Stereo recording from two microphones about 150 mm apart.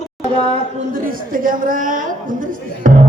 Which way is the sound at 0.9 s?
65° right (ahead or behind).